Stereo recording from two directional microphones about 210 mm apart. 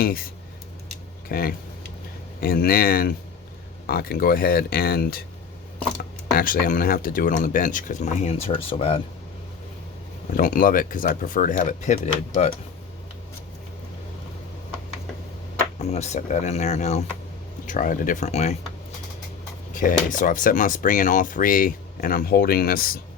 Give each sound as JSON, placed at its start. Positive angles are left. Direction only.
{"t": 0.0, "sound": "speech", "side_deg": 45}
{"t": 1.3, "sound": "speech", "side_deg": 45}
{"t": 6.3, "sound": "speech", "side_deg": 40}
{"t": 10.3, "sound": "speech", "side_deg": 40}
{"t": 15.8, "sound": "speech", "side_deg": 30}
{"t": 19.7, "sound": "speech", "side_deg": 40}